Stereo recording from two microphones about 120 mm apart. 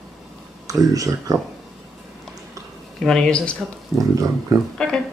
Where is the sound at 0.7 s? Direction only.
30° right (ahead or behind).